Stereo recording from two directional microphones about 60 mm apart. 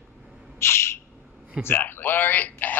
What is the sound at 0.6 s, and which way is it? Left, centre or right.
Bird, left.